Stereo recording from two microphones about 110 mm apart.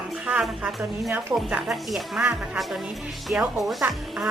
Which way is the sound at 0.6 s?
10° right (ahead or behind).